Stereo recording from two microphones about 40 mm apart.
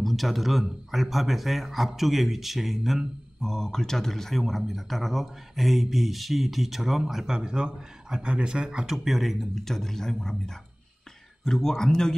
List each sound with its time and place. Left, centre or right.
0.0 s speech: centre
3.4 s speech: centre
7.3 s a man's voice: right
8.9 s speech: centre